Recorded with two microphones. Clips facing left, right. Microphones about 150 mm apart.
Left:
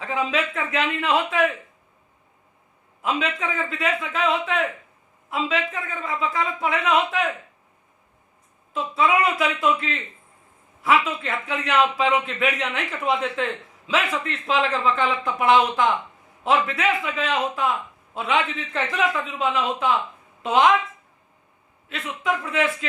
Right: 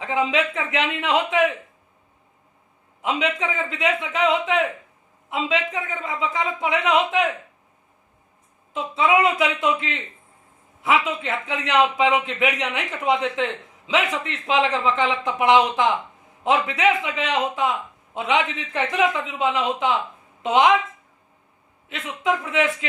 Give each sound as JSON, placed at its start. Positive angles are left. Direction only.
{"t": 0.0, "sound": "a man's voice", "side_deg": -20}
{"t": 3.0, "sound": "a man's voice", "side_deg": -20}
{"t": 8.7, "sound": "a man's voice", "side_deg": -20}
{"t": 21.8, "sound": "a man's voice", "side_deg": -20}